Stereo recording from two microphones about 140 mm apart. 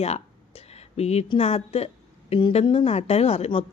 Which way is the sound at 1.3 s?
45° left (ahead or behind).